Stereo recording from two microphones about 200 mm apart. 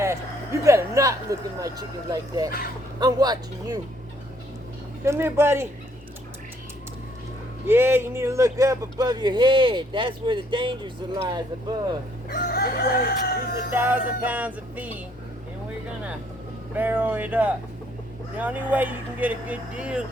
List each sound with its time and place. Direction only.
0.0 s speech: 15° right (ahead or behind)
5.0 s speech: 15° right (ahead or behind)
7.7 s speech: 10° right (ahead or behind)
12.3 s chicken: 50° left (ahead or behind)
13.7 s speech: 10° right (ahead or behind)
16.7 s speech: 10° right (ahead or behind)